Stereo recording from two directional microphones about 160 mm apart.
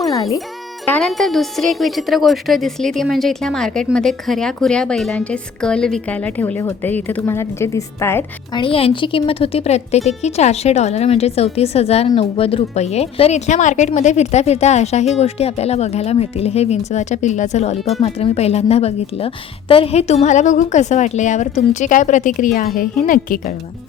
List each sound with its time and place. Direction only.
0.0 s music: 20° left (ahead or behind)
0.9 s a woman's voice: 5° left (ahead or behind)
8.5 s a woman's voice: 35° left (ahead or behind); by 23.6 s 60° left (ahead or behind)